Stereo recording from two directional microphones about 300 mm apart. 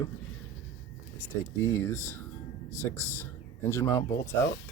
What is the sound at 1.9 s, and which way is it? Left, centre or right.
Speech, left.